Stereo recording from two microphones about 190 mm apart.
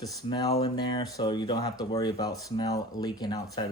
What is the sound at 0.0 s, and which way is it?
Speech, 20° left (ahead or behind).